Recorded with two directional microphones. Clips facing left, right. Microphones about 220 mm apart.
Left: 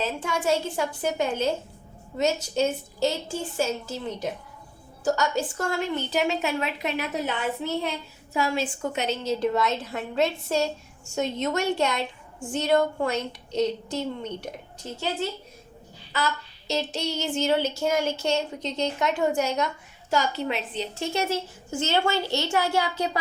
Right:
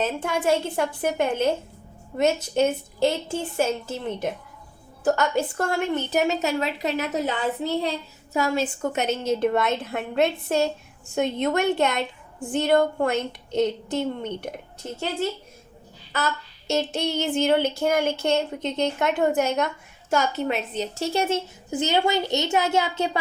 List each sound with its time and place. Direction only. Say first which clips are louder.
0.0 s a woman's voice: right 3 dB; 55° right (ahead or behind)
16.1 s child singing: right 1 dB; 50° right (ahead or behind)
16.9 s speech: right 4 dB; 55° right (ahead or behind); by 23.0 s 20° right (ahead or behind)